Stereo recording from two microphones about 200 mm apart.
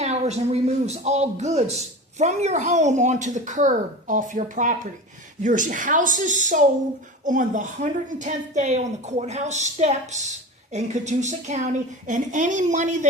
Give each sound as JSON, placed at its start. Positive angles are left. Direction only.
{"t": 0.0, "sound": "a woman's voice", "side_deg": -35}